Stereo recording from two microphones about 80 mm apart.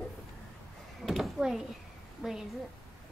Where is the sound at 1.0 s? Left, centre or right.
Centre.